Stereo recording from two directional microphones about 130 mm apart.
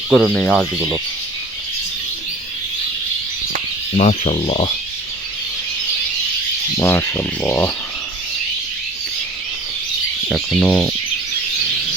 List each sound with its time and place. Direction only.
0.1 s speech: centre (ahead or behind)
3.9 s speech: 55° left (ahead or behind)
6.7 s speech: 20° left (ahead or behind)
10.2 s speech: centre (ahead or behind)